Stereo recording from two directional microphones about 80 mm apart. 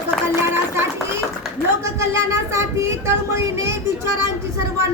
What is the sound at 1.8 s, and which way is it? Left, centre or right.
Speech, right.